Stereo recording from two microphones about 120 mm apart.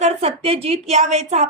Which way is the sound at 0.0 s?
60° right (ahead or behind).